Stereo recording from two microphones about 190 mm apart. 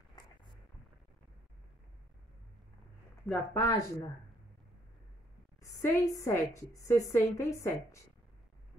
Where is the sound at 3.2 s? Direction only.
15° left (ahead or behind).